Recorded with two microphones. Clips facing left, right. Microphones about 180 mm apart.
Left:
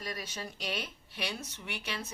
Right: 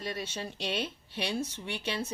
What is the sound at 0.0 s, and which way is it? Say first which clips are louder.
Speech: right 4 dB; 25° right (ahead or behind).